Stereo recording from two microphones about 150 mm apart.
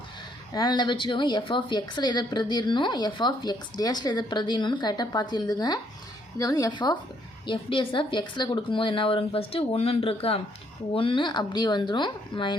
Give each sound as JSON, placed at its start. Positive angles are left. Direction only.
{"t": 0.5, "sound": "a woman's voice", "side_deg": 30}